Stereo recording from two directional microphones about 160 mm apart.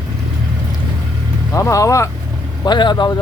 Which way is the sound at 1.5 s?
20° left (ahead or behind).